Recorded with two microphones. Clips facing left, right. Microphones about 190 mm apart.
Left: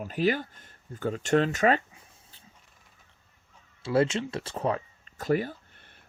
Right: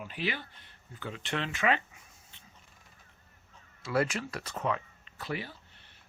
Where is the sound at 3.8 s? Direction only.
25° left (ahead or behind); by 5.6 s 45° left (ahead or behind).